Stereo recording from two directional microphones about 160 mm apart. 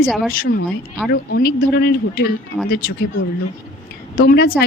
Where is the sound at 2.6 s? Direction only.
70° left (ahead or behind).